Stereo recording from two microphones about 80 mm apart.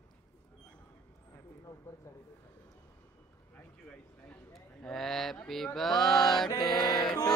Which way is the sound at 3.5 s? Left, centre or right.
Centre.